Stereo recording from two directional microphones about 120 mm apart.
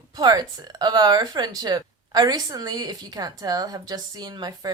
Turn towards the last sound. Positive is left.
turn(degrees=-35)  # may be behind; listen again after turning